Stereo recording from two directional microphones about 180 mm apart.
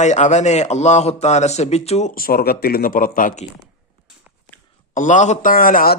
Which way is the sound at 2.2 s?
55° left (ahead or behind).